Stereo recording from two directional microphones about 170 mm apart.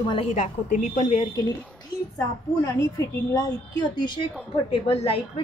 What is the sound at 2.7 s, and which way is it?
Speech, 20° left (ahead or behind).